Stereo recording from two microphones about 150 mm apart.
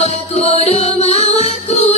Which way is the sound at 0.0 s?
45° left (ahead or behind).